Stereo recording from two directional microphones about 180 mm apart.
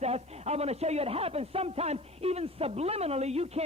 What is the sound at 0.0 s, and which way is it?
A man's voice, 35° right (ahead or behind).